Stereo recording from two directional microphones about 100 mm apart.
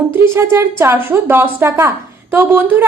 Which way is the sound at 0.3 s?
25° right (ahead or behind).